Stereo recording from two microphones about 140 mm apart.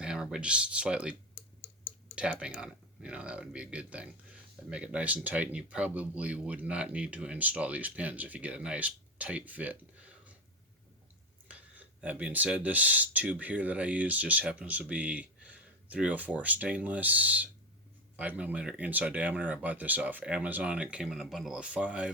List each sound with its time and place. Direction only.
0.0 s speech: 5° right (ahead or behind)
2.1 s speech: 5° right (ahead or behind)
11.4 s speech: 10° right (ahead or behind)